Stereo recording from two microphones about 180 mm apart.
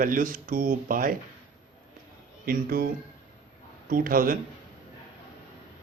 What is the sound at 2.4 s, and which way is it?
Speech, 55° right (ahead or behind).